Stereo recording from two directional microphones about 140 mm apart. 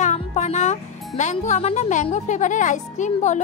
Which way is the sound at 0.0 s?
55° left (ahead or behind).